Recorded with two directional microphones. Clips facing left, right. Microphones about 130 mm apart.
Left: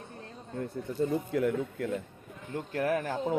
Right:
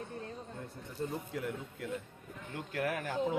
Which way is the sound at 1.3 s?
65° left (ahead or behind).